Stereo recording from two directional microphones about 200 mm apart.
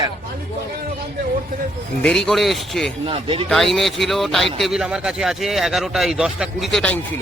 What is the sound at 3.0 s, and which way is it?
Speech, 25° right (ahead or behind).